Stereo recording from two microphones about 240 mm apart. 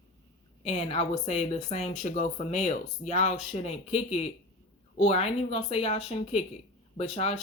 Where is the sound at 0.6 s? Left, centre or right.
Left.